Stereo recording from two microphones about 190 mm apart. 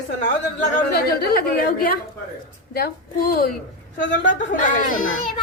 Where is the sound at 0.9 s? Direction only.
55° left (ahead or behind).